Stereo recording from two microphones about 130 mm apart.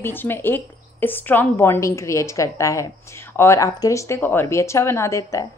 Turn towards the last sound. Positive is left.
turn(degrees=25)  # may be behind; listen again after turning